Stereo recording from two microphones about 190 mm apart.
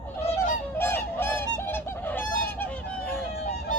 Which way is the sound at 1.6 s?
10° left (ahead or behind).